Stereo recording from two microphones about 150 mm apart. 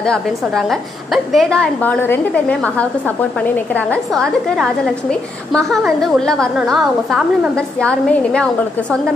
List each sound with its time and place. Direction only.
0.0 s a woman's voice: 5° left (ahead or behind)